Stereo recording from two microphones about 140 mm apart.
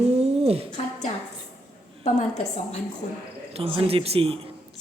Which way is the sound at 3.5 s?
45° right (ahead or behind).